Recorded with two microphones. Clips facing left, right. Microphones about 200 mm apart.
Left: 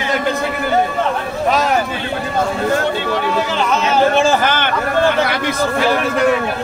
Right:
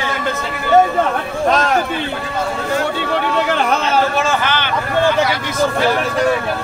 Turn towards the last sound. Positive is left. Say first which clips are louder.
# left 2 dB
turn(degrees=45)  # may be behind; listen again after turning